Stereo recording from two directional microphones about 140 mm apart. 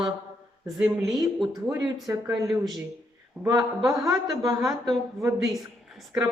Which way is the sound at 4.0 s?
25° right (ahead or behind).